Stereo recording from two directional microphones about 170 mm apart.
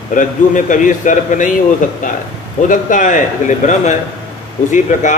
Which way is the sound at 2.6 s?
50° left (ahead or behind).